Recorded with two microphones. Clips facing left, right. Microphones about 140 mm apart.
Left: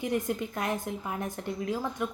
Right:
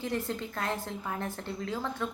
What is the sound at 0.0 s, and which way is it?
A woman's voice, 15° left (ahead or behind).